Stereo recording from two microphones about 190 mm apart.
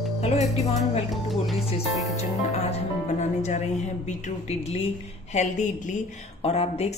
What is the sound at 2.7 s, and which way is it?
A woman's voice, 35° left (ahead or behind).